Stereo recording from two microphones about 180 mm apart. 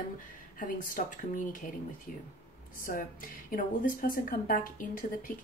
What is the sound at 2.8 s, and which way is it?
A woman's voice, 50° left (ahead or behind).